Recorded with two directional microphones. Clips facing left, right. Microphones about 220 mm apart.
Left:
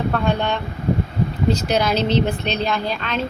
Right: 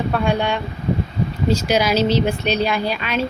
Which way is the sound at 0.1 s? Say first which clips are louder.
Right 1 dB; 10° right (ahead or behind).